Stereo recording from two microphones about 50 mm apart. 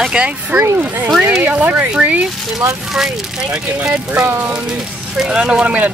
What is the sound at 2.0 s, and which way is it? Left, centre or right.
Speech, right.